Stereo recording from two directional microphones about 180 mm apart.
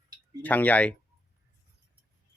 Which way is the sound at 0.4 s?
10° left (ahead or behind).